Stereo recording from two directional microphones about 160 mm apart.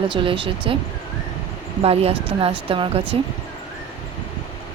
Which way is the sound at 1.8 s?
40° right (ahead or behind).